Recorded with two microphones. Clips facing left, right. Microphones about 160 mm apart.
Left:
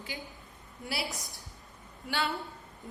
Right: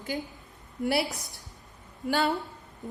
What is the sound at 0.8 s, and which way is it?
Speech, 55° right (ahead or behind).